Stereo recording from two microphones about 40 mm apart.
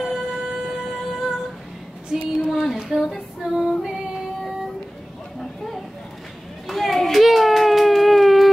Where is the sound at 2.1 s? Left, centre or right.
Centre.